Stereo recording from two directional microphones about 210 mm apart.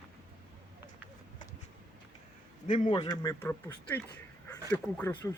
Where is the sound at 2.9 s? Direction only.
20° left (ahead or behind).